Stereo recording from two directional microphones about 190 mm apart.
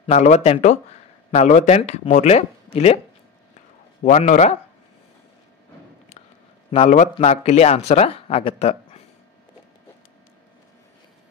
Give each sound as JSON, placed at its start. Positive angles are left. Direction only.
{"t": 0.0, "sound": "speech", "side_deg": 35}
{"t": 4.0, "sound": "speech", "side_deg": 40}
{"t": 6.7, "sound": "speech", "side_deg": 35}